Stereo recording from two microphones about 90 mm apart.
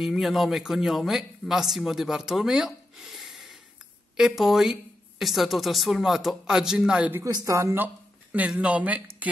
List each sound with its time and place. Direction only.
0.0 s speech: centre (ahead or behind)
7.2 s speech: 50° right (ahead or behind)
7.5 s speech: 35° right (ahead or behind)
7.8 s speech: 15° right (ahead or behind)